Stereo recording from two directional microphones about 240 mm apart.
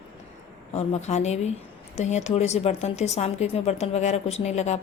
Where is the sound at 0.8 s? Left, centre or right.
Left.